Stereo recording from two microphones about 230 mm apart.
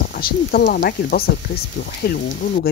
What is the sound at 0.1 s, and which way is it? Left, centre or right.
Speech, left.